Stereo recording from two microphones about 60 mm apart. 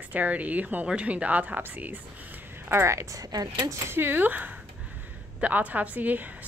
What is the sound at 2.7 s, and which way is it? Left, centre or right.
Speech, right.